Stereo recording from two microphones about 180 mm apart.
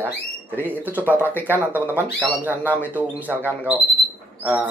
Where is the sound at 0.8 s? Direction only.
10° right (ahead or behind).